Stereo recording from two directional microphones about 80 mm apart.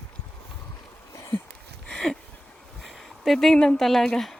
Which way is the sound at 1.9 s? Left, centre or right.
Centre.